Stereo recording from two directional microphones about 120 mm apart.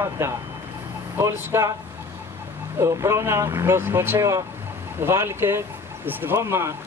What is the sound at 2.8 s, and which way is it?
Speech, 25° right (ahead or behind).